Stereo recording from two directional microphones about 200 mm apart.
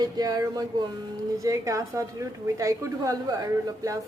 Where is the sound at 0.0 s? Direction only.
20° right (ahead or behind).